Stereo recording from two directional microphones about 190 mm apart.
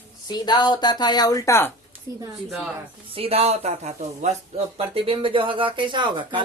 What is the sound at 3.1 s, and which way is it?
Speech, 30° right (ahead or behind).